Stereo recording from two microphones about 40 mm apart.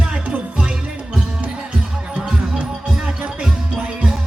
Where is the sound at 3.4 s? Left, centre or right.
Right.